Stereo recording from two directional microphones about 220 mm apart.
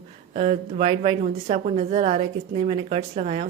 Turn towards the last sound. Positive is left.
turn(degrees=-30)  # may be behind; listen again after turning